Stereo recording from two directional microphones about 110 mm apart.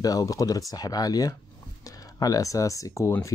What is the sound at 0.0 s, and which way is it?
Speech, 35° left (ahead or behind).